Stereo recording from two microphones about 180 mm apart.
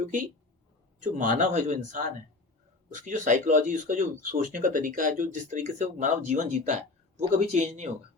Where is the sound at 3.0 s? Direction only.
45° right (ahead or behind).